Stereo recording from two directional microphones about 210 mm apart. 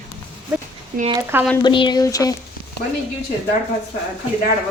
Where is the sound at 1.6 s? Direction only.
20° left (ahead or behind).